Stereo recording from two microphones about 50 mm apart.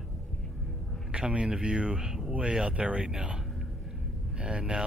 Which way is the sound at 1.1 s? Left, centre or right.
Centre.